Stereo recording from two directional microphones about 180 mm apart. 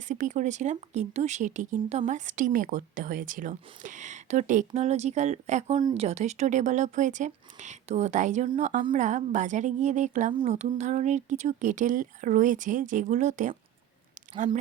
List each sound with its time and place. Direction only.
0.1 s speech: 45° right (ahead or behind)